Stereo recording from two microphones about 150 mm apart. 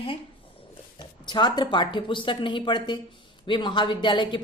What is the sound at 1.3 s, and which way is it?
A woman's voice, 30° left (ahead or behind).